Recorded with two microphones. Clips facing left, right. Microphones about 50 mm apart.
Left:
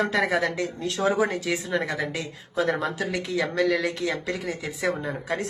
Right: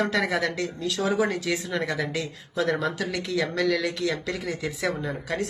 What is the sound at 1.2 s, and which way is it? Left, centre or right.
Speech, centre.